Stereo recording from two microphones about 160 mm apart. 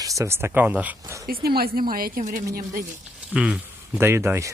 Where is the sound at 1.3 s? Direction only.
70° right (ahead or behind).